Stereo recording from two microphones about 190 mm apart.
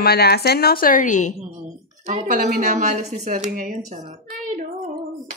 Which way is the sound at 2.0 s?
40° right (ahead or behind).